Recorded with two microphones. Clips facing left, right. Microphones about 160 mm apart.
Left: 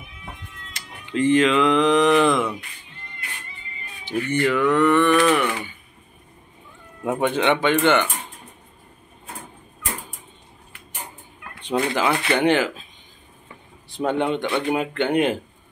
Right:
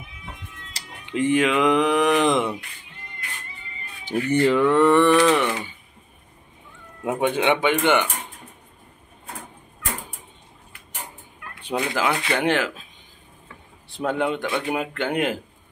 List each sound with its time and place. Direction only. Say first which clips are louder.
0.8 s a sound: even; 30° right (ahead or behind)
1.1 s speech: left 2 dB; 15° right (ahead or behind)
4.0 s a sound: right 2 dB; 40° right (ahead or behind); by 5.8 s 25° right (ahead or behind)
7.1 s speech: left 1 dB; 10° right (ahead or behind)
11.6 s speech: left 2 dB; centre (ahead or behind)
13.8 s speech: left 2 dB; centre (ahead or behind)